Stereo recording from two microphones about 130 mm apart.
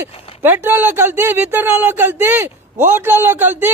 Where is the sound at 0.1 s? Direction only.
50° left (ahead or behind).